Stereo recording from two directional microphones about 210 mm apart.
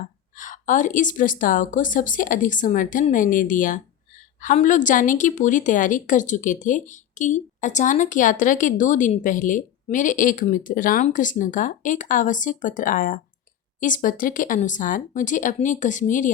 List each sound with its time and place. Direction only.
0.3 s a woman's voice: 40° left (ahead or behind)